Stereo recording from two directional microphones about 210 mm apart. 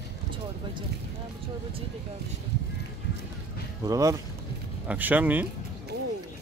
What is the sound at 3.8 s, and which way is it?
Speech, 15° right (ahead or behind).